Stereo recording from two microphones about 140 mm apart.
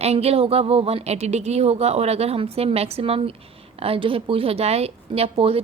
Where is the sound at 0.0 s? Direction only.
50° right (ahead or behind).